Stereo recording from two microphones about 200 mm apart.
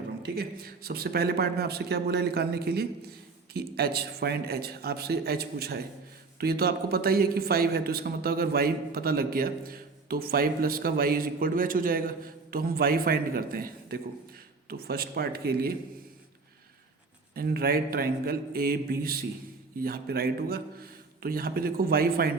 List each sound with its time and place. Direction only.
0.2 s speech: 50° right (ahead or behind)
17.3 s speech: 50° right (ahead or behind)